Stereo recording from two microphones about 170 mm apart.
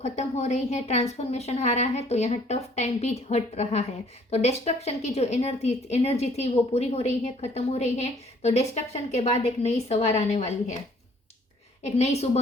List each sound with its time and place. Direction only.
0.0 s a woman's voice: 40° left (ahead or behind)
11.9 s a woman's voice: 40° left (ahead or behind)